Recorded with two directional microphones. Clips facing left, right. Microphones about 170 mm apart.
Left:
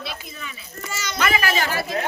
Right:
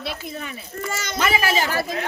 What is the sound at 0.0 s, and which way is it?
A child's voice, 55° right (ahead or behind).